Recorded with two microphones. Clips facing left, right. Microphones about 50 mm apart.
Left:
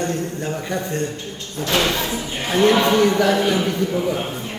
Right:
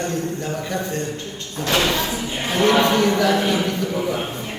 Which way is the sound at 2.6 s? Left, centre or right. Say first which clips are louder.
Left 1 dB; right.